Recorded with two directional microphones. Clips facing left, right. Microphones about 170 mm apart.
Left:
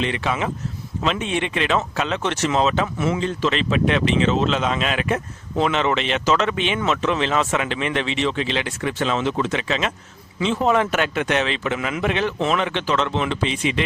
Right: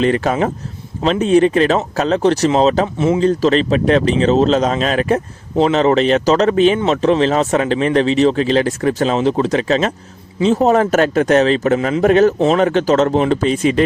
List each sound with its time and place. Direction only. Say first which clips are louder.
0.0 s speech: right 8 dB; 45° right (ahead or behind)